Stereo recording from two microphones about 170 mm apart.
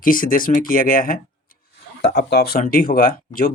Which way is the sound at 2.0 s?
70° left (ahead or behind).